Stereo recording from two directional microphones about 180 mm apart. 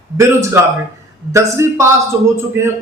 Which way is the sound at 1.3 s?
15° right (ahead or behind).